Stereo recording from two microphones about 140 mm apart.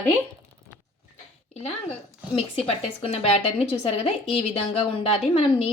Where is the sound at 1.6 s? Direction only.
45° left (ahead or behind).